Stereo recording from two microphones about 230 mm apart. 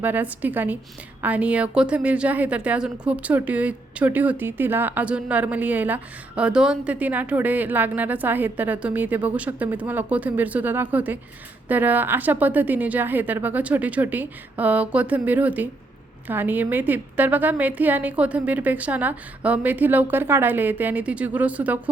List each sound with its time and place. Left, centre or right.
0.0 s a woman's voice: centre